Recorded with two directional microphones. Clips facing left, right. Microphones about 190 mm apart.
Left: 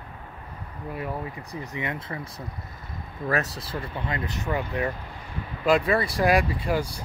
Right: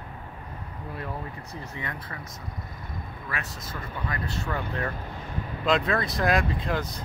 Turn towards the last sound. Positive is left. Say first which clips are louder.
# left 3 dB
turn(degrees=10)  # may be behind; listen again after turning